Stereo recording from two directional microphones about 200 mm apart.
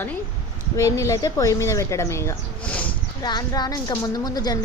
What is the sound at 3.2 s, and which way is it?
A woman's voice, 20° left (ahead or behind).